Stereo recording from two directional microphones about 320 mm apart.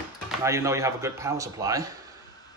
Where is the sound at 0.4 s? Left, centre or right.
Centre.